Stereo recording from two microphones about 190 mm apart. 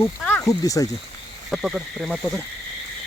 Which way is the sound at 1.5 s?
5° right (ahead or behind).